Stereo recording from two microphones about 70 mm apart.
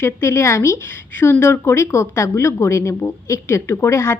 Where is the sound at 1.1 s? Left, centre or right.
Left.